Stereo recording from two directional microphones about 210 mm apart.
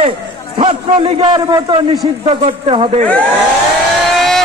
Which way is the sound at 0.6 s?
25° right (ahead or behind).